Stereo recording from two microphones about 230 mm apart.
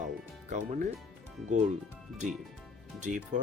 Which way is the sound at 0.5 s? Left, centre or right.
Right.